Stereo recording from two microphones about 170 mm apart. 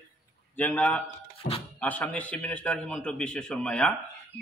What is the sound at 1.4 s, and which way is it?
Speech, 55° left (ahead or behind).